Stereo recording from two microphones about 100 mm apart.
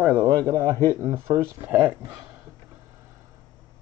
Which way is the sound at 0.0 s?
10° right (ahead or behind).